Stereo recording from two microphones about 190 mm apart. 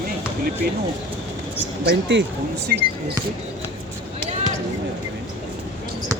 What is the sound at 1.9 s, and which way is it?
Speech, 70° right (ahead or behind).